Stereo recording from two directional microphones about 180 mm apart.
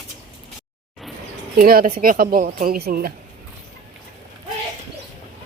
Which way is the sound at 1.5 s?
55° right (ahead or behind).